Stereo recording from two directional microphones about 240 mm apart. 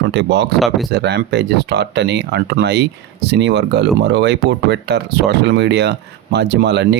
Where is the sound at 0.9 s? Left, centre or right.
Right.